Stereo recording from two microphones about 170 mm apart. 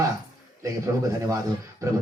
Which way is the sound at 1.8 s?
20° right (ahead or behind).